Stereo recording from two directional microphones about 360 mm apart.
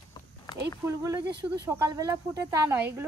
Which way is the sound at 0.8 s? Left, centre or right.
Centre.